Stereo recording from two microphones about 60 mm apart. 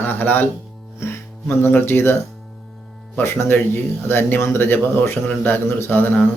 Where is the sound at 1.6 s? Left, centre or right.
Left.